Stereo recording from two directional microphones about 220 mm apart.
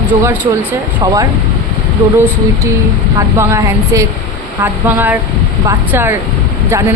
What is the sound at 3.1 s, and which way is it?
Speech, 10° right (ahead or behind).